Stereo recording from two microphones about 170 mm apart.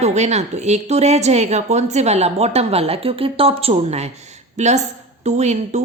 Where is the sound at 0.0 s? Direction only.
40° right (ahead or behind).